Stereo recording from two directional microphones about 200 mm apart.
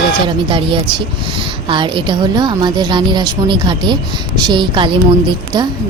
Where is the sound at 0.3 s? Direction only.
25° right (ahead or behind).